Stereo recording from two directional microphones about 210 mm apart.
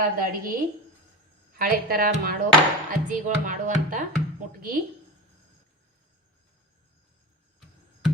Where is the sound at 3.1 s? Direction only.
40° right (ahead or behind).